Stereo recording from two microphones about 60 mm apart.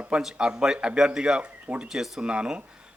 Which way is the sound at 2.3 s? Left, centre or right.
Centre.